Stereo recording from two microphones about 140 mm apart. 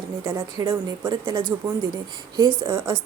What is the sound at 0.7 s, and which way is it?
A woman's voice, 35° right (ahead or behind).